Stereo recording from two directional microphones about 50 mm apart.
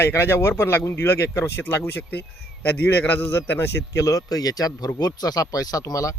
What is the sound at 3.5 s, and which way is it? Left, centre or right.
Speech, left.